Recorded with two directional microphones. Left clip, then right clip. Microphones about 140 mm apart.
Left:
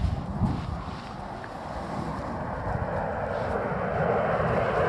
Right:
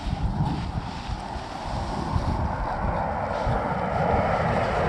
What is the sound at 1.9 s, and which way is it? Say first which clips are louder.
Boat: right 3 dB; 40° left (ahead or behind).